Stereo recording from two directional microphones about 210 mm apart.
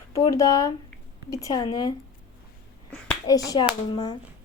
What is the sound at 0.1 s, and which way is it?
Speech, 15° left (ahead or behind).